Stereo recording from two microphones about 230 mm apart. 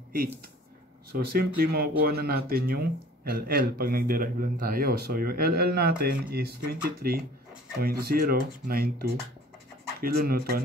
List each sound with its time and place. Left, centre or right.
0.1 s a man's voice: right